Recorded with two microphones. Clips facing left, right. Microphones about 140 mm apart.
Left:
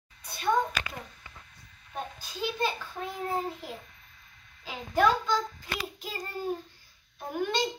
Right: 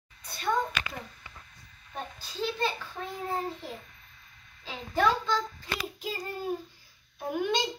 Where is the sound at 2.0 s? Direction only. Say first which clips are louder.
Even; 10° left (ahead or behind).